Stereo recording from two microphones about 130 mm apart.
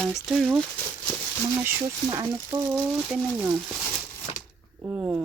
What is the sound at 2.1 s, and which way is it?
Speech, 25° right (ahead or behind).